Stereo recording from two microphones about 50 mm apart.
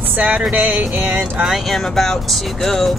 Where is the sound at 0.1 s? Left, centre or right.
Right.